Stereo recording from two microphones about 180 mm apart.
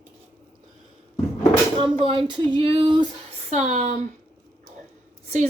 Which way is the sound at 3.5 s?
40° right (ahead or behind).